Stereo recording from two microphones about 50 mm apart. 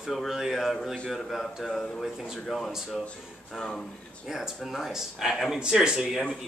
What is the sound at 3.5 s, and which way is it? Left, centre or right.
Speech, centre.